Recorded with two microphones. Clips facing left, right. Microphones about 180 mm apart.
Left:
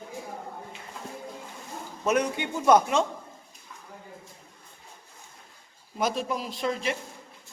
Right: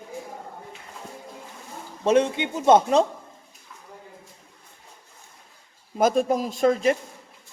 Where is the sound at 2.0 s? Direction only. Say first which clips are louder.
Right 6 dB; 25° right (ahead or behind).